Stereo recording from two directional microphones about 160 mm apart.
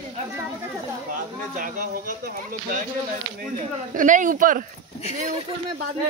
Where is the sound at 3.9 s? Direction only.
55° right (ahead or behind).